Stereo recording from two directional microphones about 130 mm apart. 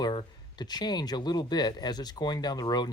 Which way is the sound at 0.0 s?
35° left (ahead or behind).